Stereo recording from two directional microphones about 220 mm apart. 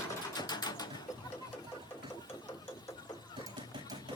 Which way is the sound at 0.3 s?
20° left (ahead or behind).